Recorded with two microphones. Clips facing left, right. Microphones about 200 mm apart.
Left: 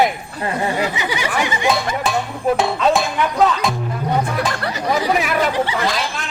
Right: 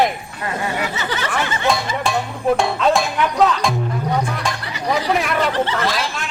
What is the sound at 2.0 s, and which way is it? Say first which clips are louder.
A man's voice: even; centre (ahead or behind).